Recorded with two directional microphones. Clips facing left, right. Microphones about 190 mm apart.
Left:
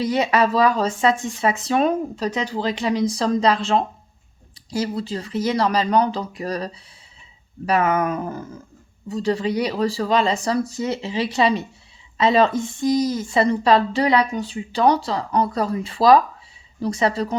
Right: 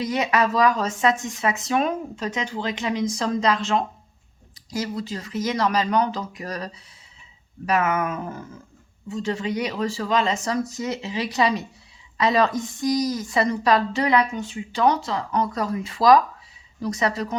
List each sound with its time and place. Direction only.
0.0 s a woman's voice: 30° left (ahead or behind)
7.7 s a woman's voice: 35° left (ahead or behind)